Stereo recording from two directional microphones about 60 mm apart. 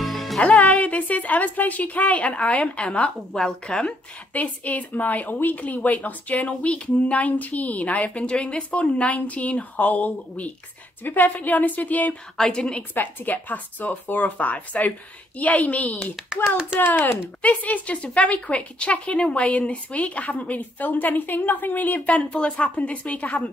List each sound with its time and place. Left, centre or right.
0.0 s music: centre
0.4 s a woman's voice: centre
3.3 s speech: centre
4.3 s a woman's voice: left
12.4 s speech: centre
12.9 s a woman's voice: left
16.8 s speech: left
17.4 s a woman's voice: left